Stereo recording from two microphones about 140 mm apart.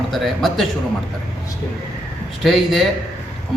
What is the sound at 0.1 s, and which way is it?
Speech, centre (ahead or behind).